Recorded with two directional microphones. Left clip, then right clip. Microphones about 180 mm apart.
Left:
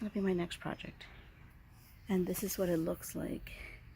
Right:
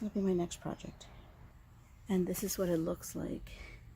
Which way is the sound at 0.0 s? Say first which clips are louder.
Right 1 dB; centre (ahead or behind).